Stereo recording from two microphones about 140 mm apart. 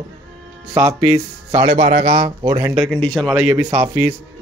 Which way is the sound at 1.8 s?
40° right (ahead or behind).